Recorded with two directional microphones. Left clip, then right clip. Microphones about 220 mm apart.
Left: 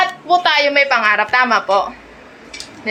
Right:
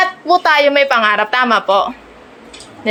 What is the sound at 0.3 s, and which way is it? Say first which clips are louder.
A woman's voice: right 3 dB; 50° right (ahead or behind).